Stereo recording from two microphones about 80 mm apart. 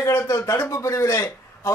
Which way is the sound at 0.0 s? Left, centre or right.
Left.